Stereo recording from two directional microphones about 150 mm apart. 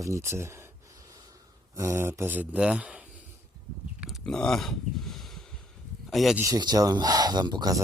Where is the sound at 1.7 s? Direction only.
20° right (ahead or behind).